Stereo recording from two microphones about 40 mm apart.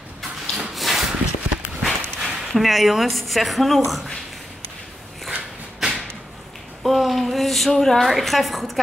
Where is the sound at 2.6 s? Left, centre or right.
Centre.